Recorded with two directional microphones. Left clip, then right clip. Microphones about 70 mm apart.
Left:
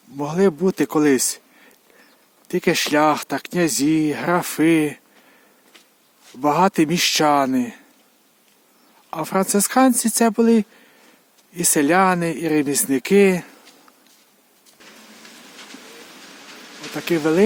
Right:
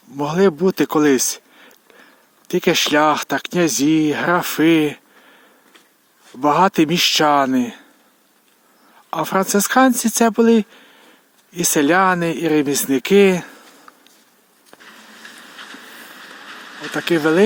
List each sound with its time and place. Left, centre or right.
0.2 s speech: right
6.4 s speech: right
9.0 s speech: right
16.9 s speech: right